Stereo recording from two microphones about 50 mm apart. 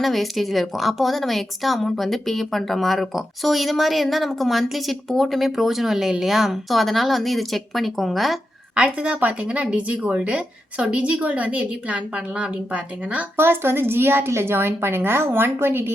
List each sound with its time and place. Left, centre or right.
0.0 s a woman's voice: centre
8.7 s speech: right
13.3 s a woman's voice: right